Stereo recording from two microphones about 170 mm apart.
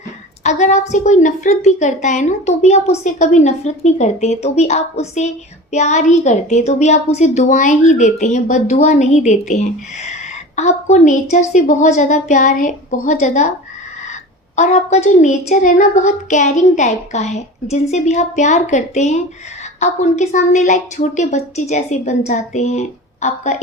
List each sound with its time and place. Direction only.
0.4 s a woman's voice: 40° left (ahead or behind)